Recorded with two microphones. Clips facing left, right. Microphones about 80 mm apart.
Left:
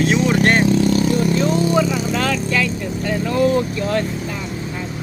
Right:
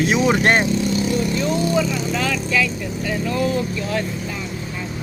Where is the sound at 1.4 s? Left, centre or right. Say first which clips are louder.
Left 3 dB; left.